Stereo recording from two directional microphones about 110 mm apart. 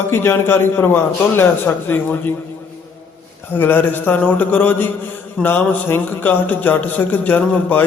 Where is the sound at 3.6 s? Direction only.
20° left (ahead or behind).